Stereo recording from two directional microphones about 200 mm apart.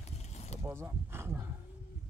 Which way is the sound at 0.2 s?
35° left (ahead or behind).